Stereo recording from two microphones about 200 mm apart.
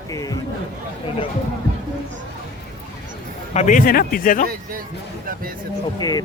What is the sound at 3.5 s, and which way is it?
Speech, 40° left (ahead or behind).